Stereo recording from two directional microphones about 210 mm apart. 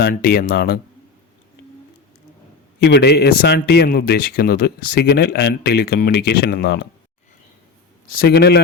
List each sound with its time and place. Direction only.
0.0 s a man's voice: 45° left (ahead or behind)
2.8 s a man's voice: 50° left (ahead or behind)
8.2 s a man's voice: 50° left (ahead or behind)